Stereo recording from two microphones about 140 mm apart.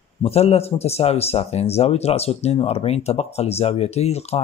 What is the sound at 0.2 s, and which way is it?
Speech, 45° left (ahead or behind).